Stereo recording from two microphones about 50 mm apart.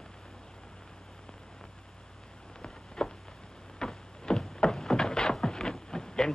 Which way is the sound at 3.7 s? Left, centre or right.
Centre.